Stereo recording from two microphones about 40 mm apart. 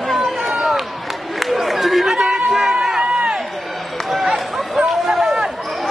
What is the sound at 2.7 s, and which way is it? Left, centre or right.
Run, centre.